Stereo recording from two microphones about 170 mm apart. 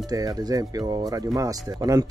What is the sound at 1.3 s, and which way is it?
Speech, 20° right (ahead or behind).